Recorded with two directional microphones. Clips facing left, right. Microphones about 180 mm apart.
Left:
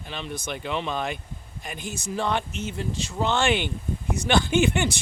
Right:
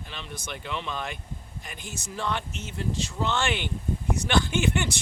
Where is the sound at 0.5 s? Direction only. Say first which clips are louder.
Left 5 dB; 20° left (ahead or behind).